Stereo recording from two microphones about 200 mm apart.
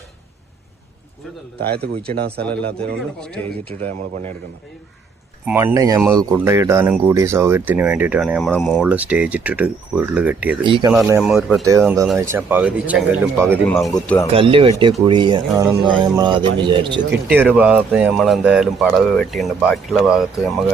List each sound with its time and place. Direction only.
1.5 s a man's voice: 55° right (ahead or behind)
2.4 s speech: 5° left (ahead or behind)
3.7 s speech: 30° right (ahead or behind)
5.5 s speech: 10° right (ahead or behind); by 8.8 s 5° left (ahead or behind)
8.8 s speech: 5° right (ahead or behind)
10.6 s speech: 25° right (ahead or behind)
11.0 s speech: 15° right (ahead or behind)
13.7 s speech: 5° left (ahead or behind)
14.3 s speech: 25° right (ahead or behind)
17.3 s speech: 10° right (ahead or behind)